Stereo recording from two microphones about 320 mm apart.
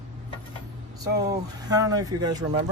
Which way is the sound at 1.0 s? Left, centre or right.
Centre.